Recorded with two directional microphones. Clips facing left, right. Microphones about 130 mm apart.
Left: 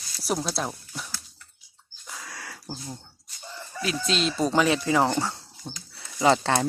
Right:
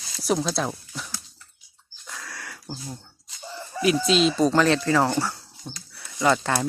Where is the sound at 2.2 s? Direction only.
25° left (ahead or behind).